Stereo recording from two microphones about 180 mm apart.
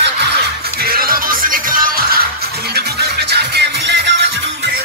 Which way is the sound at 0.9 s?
50° right (ahead or behind).